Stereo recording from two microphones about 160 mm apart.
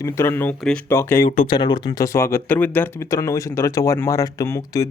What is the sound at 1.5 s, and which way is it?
Speech, 30° left (ahead or behind).